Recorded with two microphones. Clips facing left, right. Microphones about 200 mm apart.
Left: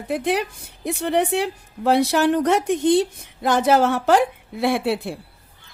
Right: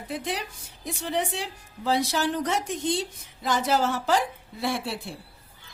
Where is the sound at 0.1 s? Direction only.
60° left (ahead or behind).